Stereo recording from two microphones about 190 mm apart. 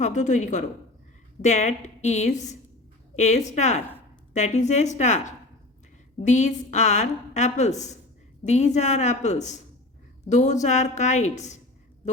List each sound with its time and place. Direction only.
0.0 s a woman's voice: 40° left (ahead or behind)